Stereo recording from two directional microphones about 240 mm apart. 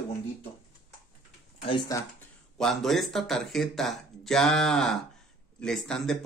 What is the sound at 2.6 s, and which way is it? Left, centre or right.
Speech, centre.